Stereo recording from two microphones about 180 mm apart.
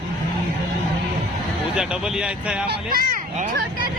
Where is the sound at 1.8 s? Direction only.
5° right (ahead or behind).